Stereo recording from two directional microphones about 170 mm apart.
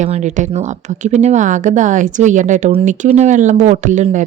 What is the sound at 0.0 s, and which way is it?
Speech, 45° right (ahead or behind).